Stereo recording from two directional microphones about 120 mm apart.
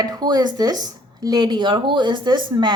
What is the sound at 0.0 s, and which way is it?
A woman's voice, 35° right (ahead or behind).